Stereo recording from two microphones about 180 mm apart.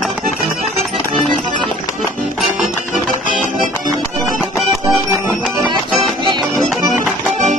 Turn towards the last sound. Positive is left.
turn(degrees=0)  # may be behind; listen again after turning